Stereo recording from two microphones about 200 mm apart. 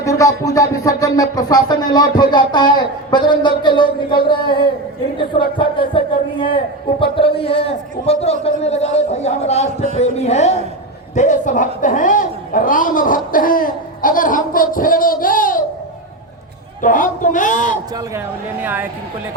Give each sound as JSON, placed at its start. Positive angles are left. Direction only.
{"t": 0.0, "sound": "speech", "side_deg": 15}
{"t": 7.2, "sound": "a man's voice", "side_deg": 25}
{"t": 16.8, "sound": "speech", "side_deg": 40}
{"t": 18.6, "sound": "a woman's voice", "side_deg": -10}